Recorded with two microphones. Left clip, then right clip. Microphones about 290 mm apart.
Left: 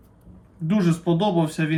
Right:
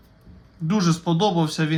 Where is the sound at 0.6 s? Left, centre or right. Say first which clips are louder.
Even; centre.